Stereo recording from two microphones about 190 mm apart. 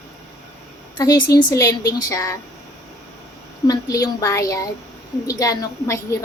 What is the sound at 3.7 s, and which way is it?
A woman's voice, 20° left (ahead or behind).